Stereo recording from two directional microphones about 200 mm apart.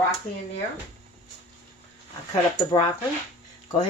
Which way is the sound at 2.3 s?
25° left (ahead or behind).